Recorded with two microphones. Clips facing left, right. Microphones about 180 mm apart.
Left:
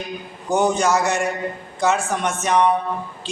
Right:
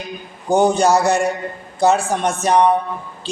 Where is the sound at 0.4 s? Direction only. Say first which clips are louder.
Right 4 dB; 35° right (ahead or behind).